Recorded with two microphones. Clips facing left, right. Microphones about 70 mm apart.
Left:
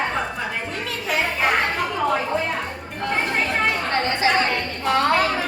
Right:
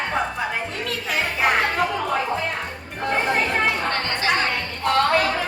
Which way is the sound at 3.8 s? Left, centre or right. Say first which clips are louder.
Left 3 dB; centre.